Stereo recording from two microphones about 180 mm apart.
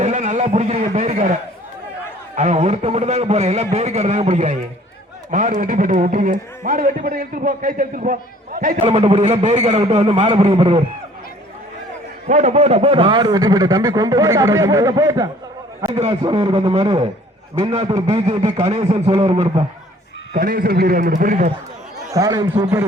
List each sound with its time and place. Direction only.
0.0 s a man's voice: 40° right (ahead or behind)
8.8 s a man's voice: 30° right (ahead or behind)
12.3 s a man's voice: 40° right (ahead or behind)
20.3 s a man's voice: 50° right (ahead or behind)
22.1 s a man's voice: 20° right (ahead or behind)